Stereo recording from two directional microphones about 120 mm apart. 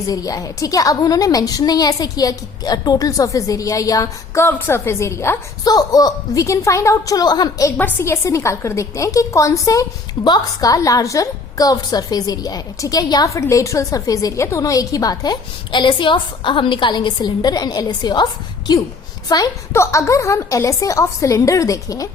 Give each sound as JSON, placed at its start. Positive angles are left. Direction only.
{"t": 0.1, "sound": "a woman's voice", "side_deg": 30}
{"t": 7.8, "sound": "a woman's voice", "side_deg": 15}